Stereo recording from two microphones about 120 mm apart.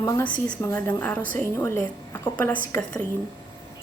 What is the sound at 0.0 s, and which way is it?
A woman's voice, 20° left (ahead or behind).